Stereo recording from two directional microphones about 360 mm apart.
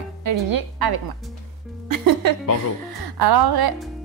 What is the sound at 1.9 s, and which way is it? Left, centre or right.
Music, right.